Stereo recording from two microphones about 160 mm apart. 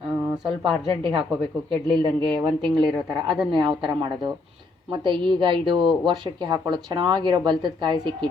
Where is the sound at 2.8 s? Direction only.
Centre (ahead or behind).